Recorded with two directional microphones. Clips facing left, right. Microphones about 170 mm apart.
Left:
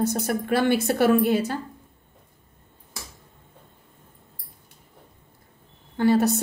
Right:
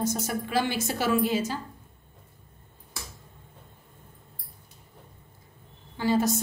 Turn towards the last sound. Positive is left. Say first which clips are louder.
# left 5 dB
turn(degrees=60)  # may be behind; listen again after turning